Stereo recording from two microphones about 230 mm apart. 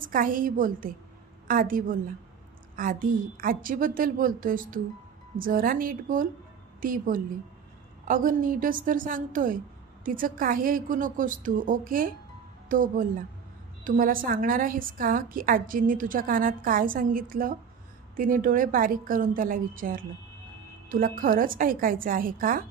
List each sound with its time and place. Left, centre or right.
0.0 s a woman's voice: right